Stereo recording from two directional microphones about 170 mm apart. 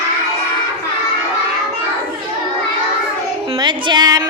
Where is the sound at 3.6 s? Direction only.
25° right (ahead or behind).